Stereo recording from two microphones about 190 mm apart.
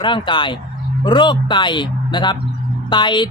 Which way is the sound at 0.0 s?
25° left (ahead or behind).